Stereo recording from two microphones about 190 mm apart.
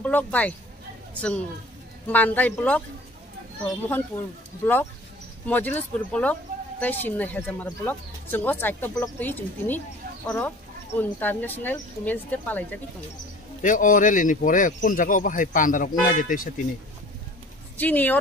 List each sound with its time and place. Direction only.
0.0 s speech: 10° left (ahead or behind)
2.0 s speech: 10° left (ahead or behind)
3.8 s speech: 10° left (ahead or behind)
5.5 s speech: 10° left (ahead or behind)
13.6 s speech: 45° left (ahead or behind)
17.7 s speech: 10° left (ahead or behind)